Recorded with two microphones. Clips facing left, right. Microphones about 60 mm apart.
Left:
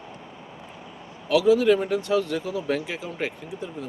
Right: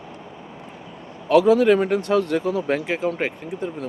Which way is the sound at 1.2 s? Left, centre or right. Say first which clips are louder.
Right 3 dB; right.